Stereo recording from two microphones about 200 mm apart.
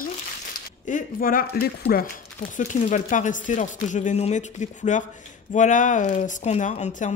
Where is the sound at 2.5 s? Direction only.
40° left (ahead or behind).